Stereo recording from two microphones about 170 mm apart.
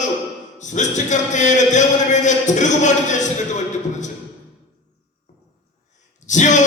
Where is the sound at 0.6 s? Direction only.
45° left (ahead or behind).